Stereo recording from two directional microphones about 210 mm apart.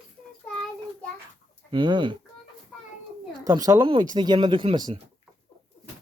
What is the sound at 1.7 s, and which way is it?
Speech, 20° right (ahead or behind).